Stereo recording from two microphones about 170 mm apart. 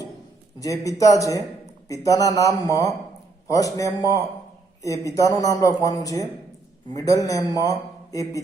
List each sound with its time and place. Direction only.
0.6 s a man's voice: 20° left (ahead or behind)